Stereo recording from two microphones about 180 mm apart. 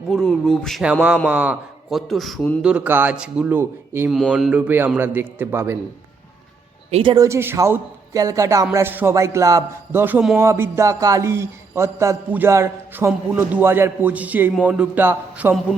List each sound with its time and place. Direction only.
0.1 s a man's voice: 5° left (ahead or behind)
4.1 s a man's voice: centre (ahead or behind)
6.9 s speech: 30° right (ahead or behind)
7.3 s a man's voice: 15° right (ahead or behind)